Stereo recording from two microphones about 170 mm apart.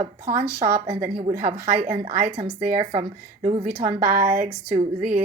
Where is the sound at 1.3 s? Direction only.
50° right (ahead or behind).